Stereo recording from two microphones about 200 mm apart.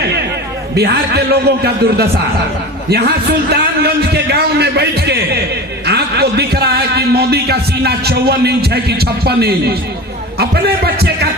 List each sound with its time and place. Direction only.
0.8 s speech: 55° right (ahead or behind)